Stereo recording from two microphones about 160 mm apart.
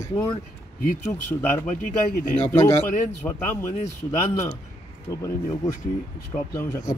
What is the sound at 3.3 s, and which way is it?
Speech, 15° left (ahead or behind).